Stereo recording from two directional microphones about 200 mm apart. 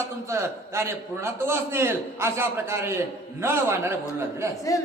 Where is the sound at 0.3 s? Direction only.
15° right (ahead or behind).